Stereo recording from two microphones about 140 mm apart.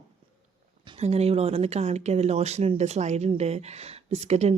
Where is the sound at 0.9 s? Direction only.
45° right (ahead or behind).